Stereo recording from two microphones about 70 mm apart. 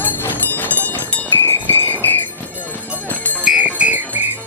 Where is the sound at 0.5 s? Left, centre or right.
Left.